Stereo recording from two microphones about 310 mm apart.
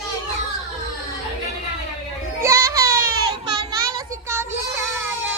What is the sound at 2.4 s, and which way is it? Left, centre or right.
Music, centre.